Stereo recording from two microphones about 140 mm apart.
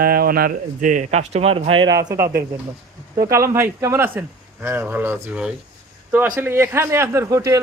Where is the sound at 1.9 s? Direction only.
25° right (ahead or behind).